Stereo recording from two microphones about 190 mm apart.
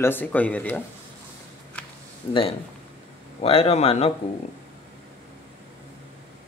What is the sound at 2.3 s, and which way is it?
Speech, 30° left (ahead or behind).